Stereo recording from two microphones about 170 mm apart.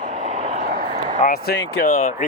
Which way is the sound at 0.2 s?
40° right (ahead or behind).